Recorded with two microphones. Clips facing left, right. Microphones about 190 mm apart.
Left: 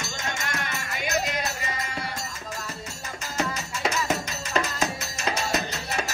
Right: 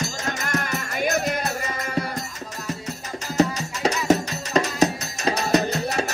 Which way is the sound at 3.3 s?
35° right (ahead or behind).